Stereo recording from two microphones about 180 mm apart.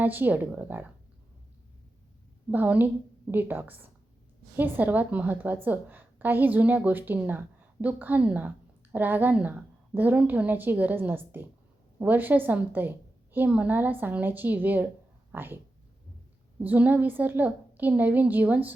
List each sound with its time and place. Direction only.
0.0 s a woman's voice: 10° right (ahead or behind)
2.5 s a woman's voice: 10° right (ahead or behind)
16.6 s a woman's voice: 10° right (ahead or behind)